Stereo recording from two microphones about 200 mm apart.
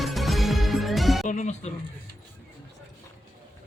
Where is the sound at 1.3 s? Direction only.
35° left (ahead or behind).